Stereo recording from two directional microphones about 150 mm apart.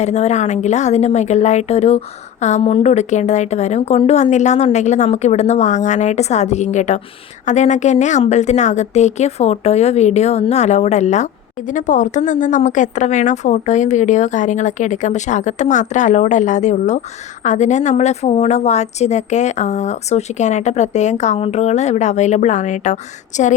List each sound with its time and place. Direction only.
0.0 s a woman's voice: 50° left (ahead or behind)